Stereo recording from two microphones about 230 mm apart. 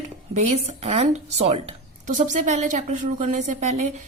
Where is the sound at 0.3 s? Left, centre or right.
Right.